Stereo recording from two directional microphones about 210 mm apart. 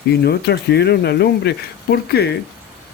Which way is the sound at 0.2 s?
50° left (ahead or behind).